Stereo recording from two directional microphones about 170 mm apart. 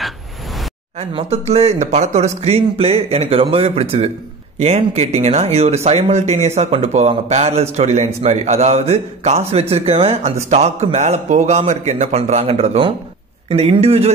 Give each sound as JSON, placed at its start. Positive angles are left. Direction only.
{"t": 0.9, "sound": "speech", "side_deg": -35}